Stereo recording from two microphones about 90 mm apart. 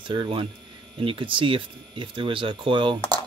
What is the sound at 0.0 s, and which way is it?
Speech, 60° right (ahead or behind).